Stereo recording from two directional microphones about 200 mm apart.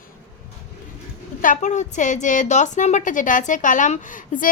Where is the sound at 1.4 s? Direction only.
40° left (ahead or behind).